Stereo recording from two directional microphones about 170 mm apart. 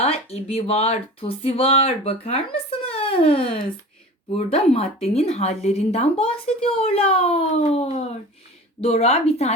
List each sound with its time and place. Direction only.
0.0 s speech: 35° left (ahead or behind)